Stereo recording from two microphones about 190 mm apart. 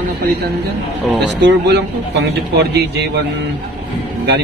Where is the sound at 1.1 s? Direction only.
65° right (ahead or behind).